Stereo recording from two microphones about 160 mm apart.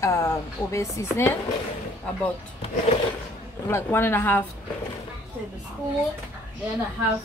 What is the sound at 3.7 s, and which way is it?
Speech, 15° left (ahead or behind).